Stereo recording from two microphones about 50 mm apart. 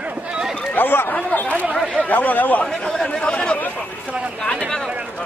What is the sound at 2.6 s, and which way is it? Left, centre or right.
Chatter, centre.